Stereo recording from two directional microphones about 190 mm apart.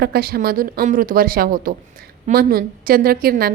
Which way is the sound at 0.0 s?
55° right (ahead or behind).